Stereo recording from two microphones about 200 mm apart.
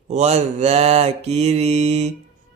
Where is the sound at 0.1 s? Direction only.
35° right (ahead or behind).